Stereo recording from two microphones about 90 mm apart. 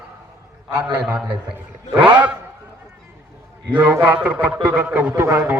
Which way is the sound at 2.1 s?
15° right (ahead or behind).